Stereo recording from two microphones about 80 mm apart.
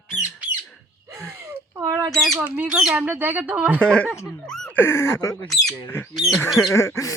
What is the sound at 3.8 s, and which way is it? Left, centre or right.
Speech, centre.